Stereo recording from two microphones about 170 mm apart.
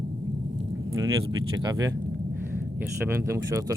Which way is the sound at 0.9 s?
20° right (ahead or behind).